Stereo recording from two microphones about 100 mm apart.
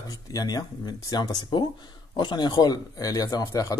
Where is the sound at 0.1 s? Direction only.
40° left (ahead or behind).